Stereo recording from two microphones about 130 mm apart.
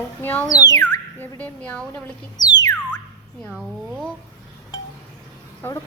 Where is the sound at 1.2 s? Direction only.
15° left (ahead or behind).